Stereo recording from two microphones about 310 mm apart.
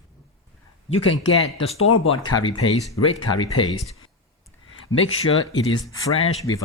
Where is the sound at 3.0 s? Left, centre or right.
Left.